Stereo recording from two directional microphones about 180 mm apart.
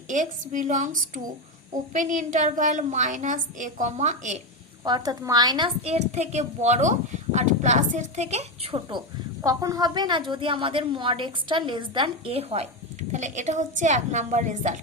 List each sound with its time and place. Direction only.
0.1 s a woman's voice: 45° right (ahead or behind)
4.8 s a woman's voice: 20° right (ahead or behind); by 14.8 s 45° right (ahead or behind)